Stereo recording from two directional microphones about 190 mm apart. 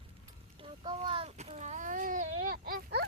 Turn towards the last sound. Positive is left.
turn(degrees=-55)  # may be behind; listen again after turning